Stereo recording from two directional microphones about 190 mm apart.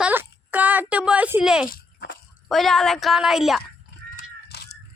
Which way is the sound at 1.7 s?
50° left (ahead or behind).